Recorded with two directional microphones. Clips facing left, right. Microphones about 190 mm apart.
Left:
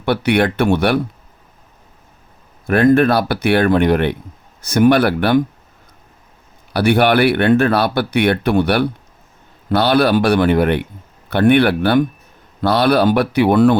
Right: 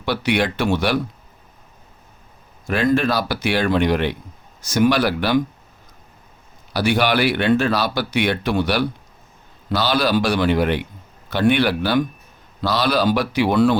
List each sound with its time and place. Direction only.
0.0 s speech: 55° left (ahead or behind)
2.6 s speech: 55° left (ahead or behind)
6.7 s speech: 60° left (ahead or behind)